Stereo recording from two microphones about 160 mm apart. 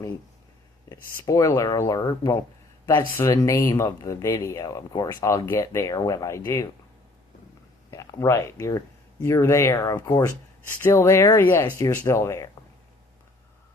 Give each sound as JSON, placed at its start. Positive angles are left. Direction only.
{"t": 0.9, "sound": "speech", "side_deg": 20}
{"t": 7.9, "sound": "speech", "side_deg": 20}